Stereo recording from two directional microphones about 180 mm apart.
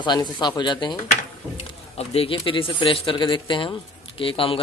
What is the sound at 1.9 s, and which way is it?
Speech, 35° left (ahead or behind).